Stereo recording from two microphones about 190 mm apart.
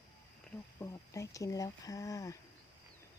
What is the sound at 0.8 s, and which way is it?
Speech, 15° left (ahead or behind).